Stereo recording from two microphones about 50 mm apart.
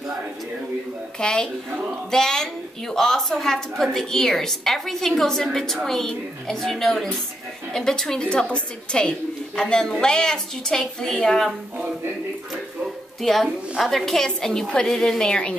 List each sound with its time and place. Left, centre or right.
1.2 s a woman's voice: centre
13.2 s a woman's voice: centre